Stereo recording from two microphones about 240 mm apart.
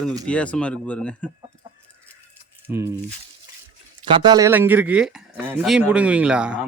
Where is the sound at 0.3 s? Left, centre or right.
Centre.